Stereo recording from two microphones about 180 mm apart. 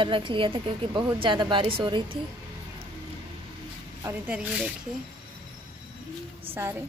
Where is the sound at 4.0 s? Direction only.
10° right (ahead or behind).